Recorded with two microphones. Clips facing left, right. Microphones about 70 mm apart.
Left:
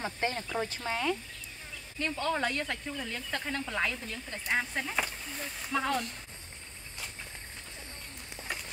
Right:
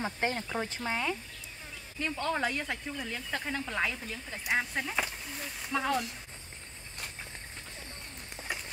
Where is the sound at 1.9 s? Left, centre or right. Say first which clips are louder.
Left 1 dB; centre.